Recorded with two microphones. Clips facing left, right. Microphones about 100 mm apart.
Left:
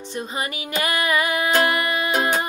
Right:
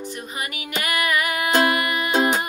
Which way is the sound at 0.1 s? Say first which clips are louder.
Left 4 dB; 30° left (ahead or behind).